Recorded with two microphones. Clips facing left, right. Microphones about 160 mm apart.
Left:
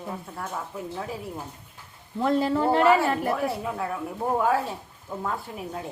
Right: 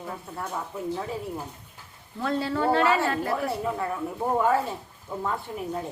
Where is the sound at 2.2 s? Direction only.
20° left (ahead or behind).